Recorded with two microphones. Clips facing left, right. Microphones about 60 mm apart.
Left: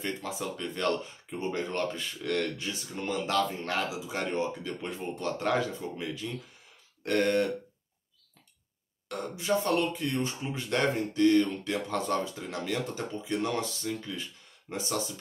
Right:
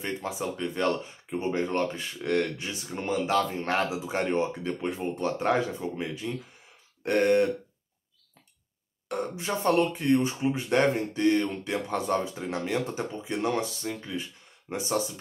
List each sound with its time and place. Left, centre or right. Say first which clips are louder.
0.0 s speech: right 3 dB; right
3.6 s speech: right 4 dB; right
4.7 s speech: right 5 dB; right
9.1 s speech: left 1 dB; right